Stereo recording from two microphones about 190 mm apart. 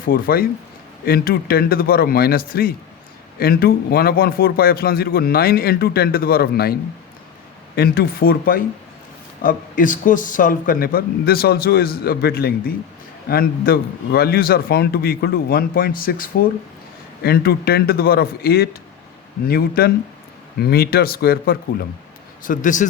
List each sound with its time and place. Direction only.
0.0 s a man's voice: 50° left (ahead or behind)
7.8 s a man's voice: 50° left (ahead or behind)
22.4 s a man's voice: 40° left (ahead or behind)